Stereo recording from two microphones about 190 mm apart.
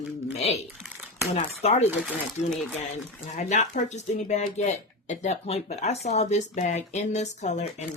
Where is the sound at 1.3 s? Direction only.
35° left (ahead or behind).